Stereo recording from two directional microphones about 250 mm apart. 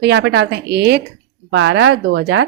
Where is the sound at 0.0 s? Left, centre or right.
Right.